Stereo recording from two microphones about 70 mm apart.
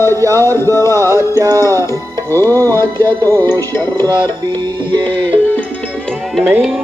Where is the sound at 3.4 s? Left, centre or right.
Left.